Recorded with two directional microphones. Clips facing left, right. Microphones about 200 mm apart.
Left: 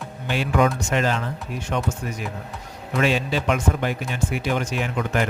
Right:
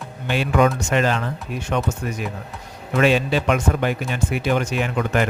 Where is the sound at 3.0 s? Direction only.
65° right (ahead or behind).